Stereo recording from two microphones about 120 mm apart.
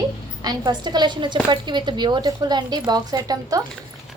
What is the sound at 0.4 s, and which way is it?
A woman's voice, 35° right (ahead or behind).